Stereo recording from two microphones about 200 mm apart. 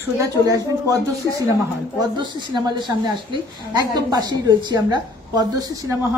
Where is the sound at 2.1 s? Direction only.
20° right (ahead or behind).